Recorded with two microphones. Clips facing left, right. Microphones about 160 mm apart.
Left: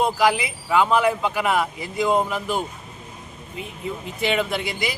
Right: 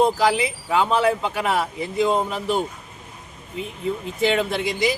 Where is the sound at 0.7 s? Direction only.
30° right (ahead or behind).